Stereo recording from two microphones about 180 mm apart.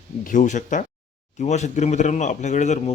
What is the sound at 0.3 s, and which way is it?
A man's voice, 45° left (ahead or behind).